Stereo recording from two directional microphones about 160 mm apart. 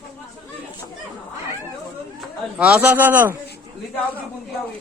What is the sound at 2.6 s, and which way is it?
Speech, 10° right (ahead or behind).